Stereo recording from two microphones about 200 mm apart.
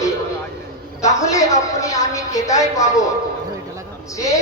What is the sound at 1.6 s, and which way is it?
Speech, 15° left (ahead or behind).